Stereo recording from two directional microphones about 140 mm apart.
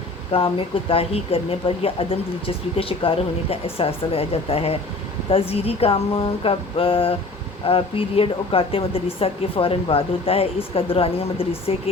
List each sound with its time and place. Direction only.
0.3 s a woman's voice: 40° left (ahead or behind)